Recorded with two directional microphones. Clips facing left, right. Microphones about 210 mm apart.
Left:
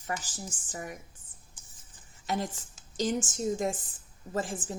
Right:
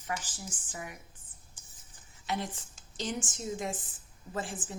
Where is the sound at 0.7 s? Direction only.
40° left (ahead or behind).